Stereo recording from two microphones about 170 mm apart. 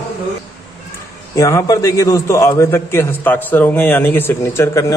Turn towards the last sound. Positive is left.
turn(degrees=15)  # may be behind; listen again after turning